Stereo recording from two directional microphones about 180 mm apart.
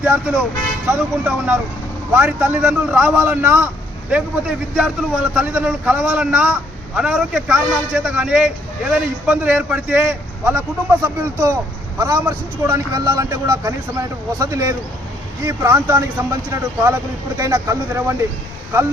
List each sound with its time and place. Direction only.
0.0 s a man's voice: 5° right (ahead or behind)